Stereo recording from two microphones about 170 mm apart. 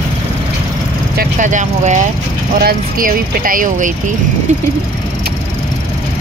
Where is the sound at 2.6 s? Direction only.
55° right (ahead or behind).